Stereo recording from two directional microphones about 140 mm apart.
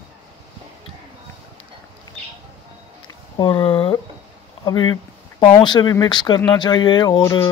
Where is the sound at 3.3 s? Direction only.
35° left (ahead or behind).